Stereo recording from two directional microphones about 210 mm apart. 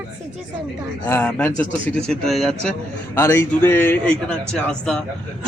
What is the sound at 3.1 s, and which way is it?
A man's voice, 10° left (ahead or behind).